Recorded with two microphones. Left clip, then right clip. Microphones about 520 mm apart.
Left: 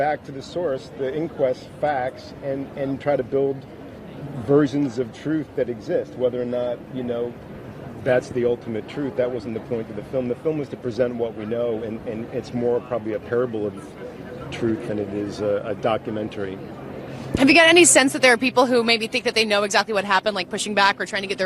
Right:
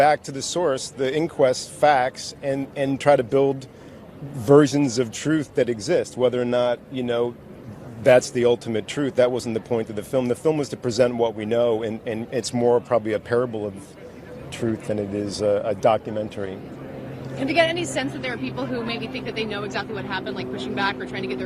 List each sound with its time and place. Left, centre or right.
0.0 s speech: right
14.9 s speech: centre
17.4 s a woman's voice: left